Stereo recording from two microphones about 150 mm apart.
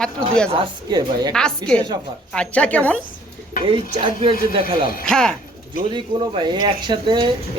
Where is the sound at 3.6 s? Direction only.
35° right (ahead or behind).